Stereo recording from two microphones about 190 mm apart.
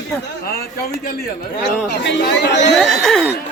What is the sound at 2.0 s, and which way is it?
Speech, 65° left (ahead or behind).